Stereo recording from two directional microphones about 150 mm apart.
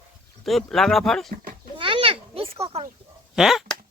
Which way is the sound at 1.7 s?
35° right (ahead or behind).